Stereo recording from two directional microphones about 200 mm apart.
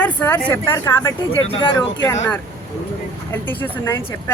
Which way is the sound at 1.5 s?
25° left (ahead or behind).